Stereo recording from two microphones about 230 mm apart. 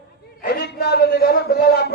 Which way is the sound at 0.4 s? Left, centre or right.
Left.